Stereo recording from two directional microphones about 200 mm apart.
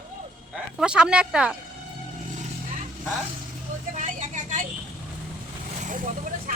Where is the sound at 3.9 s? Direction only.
40° right (ahead or behind).